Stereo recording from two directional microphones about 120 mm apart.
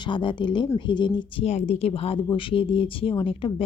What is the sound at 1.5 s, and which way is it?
A woman's voice, 60° left (ahead or behind).